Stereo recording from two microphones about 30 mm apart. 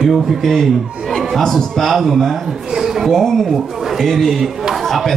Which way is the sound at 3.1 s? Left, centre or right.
Centre.